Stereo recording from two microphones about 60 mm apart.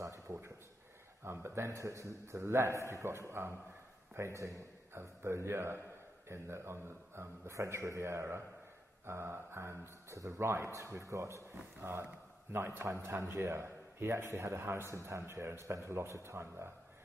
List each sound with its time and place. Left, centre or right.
0.0 s a sound: right
1.2 s a man's voice: right
10.4 s a man's voice: right
11.8 s a man's voice: right